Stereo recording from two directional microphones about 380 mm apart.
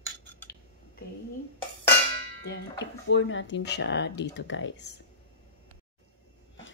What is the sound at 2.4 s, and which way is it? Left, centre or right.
Speech, left.